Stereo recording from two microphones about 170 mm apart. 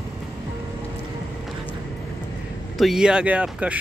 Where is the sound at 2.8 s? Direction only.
5° right (ahead or behind).